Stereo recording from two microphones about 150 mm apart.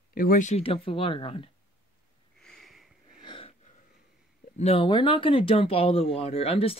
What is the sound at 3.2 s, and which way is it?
Wheeze, 35° left (ahead or behind).